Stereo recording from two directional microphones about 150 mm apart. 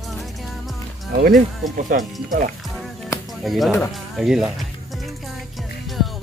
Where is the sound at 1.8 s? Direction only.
65° right (ahead or behind).